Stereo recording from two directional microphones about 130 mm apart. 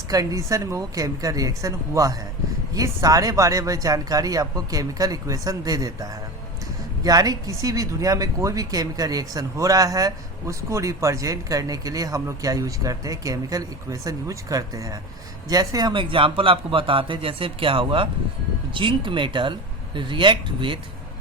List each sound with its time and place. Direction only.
0.1 s a man's voice: 25° right (ahead or behind)